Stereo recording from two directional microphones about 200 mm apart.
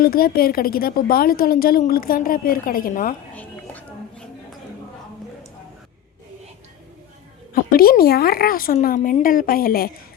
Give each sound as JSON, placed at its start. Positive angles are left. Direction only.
{"t": 0.0, "sound": "a woman's voice", "side_deg": 50}
{"t": 3.3, "sound": "music", "side_deg": 10}
{"t": 7.5, "sound": "a woman's voice", "side_deg": 50}